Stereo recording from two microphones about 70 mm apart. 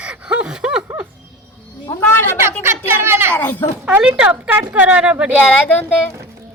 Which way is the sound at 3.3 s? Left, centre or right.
Left.